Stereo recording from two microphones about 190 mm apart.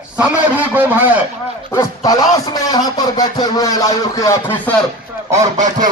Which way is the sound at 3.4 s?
20° left (ahead or behind).